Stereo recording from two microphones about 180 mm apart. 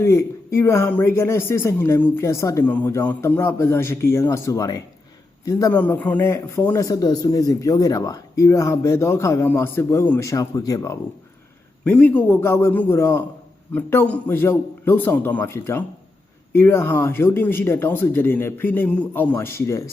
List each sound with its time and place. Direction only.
0.0 s a man's voice: 15° left (ahead or behind)
11.9 s a man's voice: 10° left (ahead or behind)